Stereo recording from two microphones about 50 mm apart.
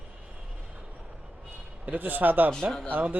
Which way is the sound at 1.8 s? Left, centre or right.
Right.